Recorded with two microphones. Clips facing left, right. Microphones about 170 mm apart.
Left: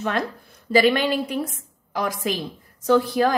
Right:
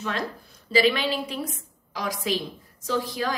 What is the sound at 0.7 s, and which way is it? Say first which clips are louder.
A woman's voice: left 4 dB; 50° left (ahead or behind).